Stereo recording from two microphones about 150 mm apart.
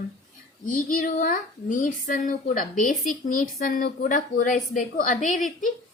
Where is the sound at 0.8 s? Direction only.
65° left (ahead or behind).